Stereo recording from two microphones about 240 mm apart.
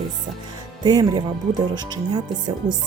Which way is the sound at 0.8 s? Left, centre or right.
Centre.